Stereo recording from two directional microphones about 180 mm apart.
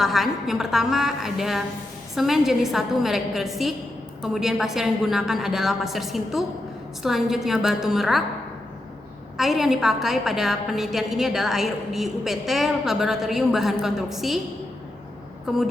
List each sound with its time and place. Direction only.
0.0 s a woman's voice: centre (ahead or behind)
9.4 s a woman's voice: centre (ahead or behind)
15.4 s a woman's voice: centre (ahead or behind)